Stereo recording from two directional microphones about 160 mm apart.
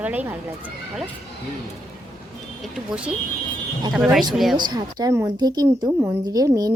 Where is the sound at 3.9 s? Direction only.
5° right (ahead or behind).